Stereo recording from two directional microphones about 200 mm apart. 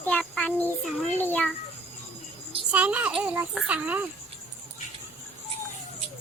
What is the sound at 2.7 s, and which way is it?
A child's voice, 5° right (ahead or behind).